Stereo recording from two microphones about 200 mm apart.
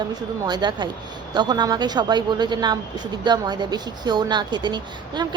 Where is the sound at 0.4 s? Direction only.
20° right (ahead or behind).